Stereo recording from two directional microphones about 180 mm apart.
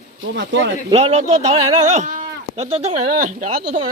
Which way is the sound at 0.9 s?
35° right (ahead or behind).